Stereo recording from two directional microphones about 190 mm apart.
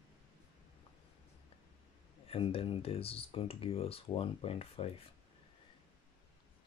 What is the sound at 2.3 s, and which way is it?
Speech, 30° left (ahead or behind).